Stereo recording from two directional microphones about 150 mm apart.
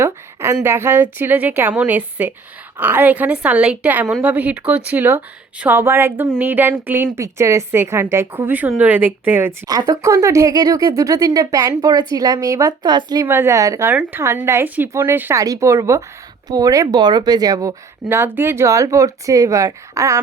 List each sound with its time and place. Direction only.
0.0 s a woman's voice: 15° right (ahead or behind)
9.6 s speech: 25° right (ahead or behind)
13.2 s a woman's voice: 15° right (ahead or behind)